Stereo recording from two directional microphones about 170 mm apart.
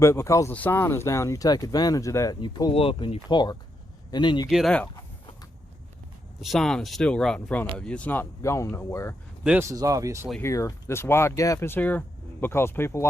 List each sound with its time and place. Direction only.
0.0 s speech: 15° left (ahead or behind)
4.4 s speech: centre (ahead or behind)
6.4 s speech: centre (ahead or behind); by 9.1 s 15° left (ahead or behind)
9.4 s speech: 5° right (ahead or behind)
9.6 s speech: 20° right (ahead or behind)
10.4 s speech: 20° left (ahead or behind)